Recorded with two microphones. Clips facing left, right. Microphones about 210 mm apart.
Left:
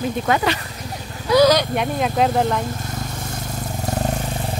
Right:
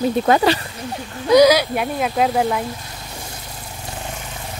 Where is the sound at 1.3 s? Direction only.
15° right (ahead or behind).